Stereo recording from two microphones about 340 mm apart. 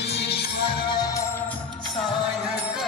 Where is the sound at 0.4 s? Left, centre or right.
Left.